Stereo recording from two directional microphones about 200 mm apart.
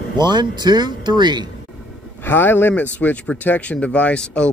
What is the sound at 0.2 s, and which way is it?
Speech, 20° right (ahead or behind).